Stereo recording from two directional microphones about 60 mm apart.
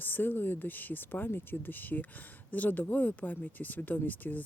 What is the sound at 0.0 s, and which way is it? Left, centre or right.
Speech, left.